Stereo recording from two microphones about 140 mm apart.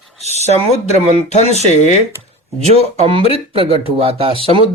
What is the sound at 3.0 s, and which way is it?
Speech, 40° right (ahead or behind).